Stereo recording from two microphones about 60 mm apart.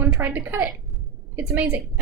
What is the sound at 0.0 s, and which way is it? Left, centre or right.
A woman's voice, right.